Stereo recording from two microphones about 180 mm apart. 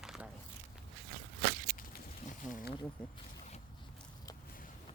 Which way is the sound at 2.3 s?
45° left (ahead or behind).